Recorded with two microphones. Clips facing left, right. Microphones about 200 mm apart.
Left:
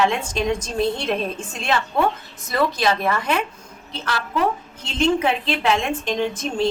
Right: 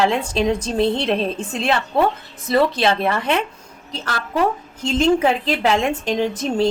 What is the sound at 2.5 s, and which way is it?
Speech, 25° right (ahead or behind).